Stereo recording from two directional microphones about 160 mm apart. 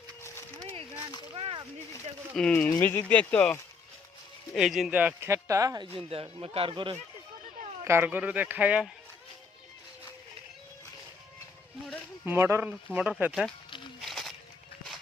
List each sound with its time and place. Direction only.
1.4 s a sound: 35° right (ahead or behind)
2.3 s speech: 5° left (ahead or behind)
4.5 s speech: centre (ahead or behind); by 5.9 s 25° right (ahead or behind)
6.4 s speech: 35° right (ahead or behind)
7.9 s speech: 15° right (ahead or behind)
12.2 s speech: 15° right (ahead or behind)
14.0 s a sound: centre (ahead or behind)